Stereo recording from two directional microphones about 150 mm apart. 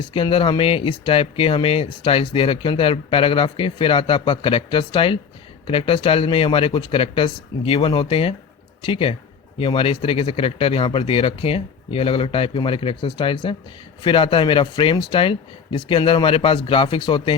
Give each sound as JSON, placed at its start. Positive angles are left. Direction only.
{"t": 0.0, "sound": "speech", "side_deg": 35}